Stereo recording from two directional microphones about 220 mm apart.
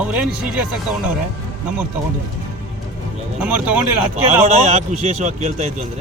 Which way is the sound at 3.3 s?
5° right (ahead or behind).